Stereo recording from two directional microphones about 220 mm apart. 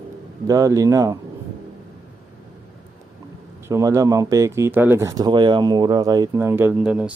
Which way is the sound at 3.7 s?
15° right (ahead or behind).